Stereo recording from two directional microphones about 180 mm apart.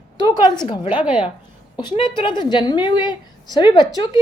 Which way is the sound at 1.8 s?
25° left (ahead or behind).